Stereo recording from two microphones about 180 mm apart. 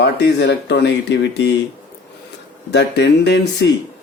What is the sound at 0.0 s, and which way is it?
Speech, 65° left (ahead or behind).